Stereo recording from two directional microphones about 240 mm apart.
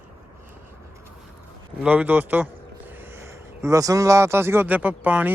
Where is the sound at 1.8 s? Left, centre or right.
Centre.